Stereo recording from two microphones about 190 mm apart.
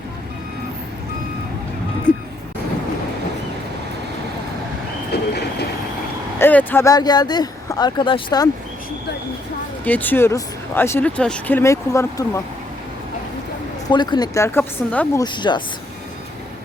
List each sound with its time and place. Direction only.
2.1 s a sound: 5° left (ahead or behind)
5.1 s train: 60° left (ahead or behind)
6.4 s speech: 10° left (ahead or behind)
9.8 s speech: 10° left (ahead or behind)
13.9 s speech: 25° left (ahead or behind)
15.2 s speech: 25° left (ahead or behind)